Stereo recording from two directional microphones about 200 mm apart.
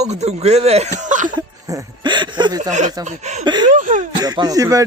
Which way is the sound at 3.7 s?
40° right (ahead or behind).